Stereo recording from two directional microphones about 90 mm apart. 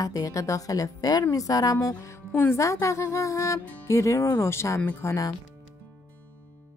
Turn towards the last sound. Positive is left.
turn(degrees=40)  # may be behind; listen again after turning